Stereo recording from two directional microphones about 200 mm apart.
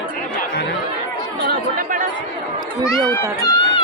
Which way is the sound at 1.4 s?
45° right (ahead or behind).